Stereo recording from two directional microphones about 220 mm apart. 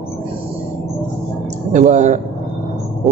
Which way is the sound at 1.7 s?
35° right (ahead or behind).